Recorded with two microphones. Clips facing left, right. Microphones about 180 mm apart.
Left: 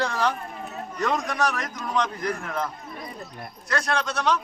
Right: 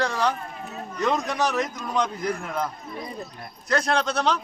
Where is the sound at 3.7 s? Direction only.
25° right (ahead or behind).